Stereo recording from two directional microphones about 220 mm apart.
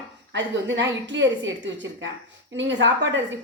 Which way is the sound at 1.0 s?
55° right (ahead or behind).